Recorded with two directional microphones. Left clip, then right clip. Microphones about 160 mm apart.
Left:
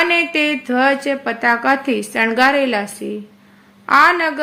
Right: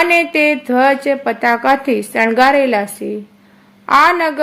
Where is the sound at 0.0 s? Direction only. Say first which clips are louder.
Right 3 dB; 25° right (ahead or behind).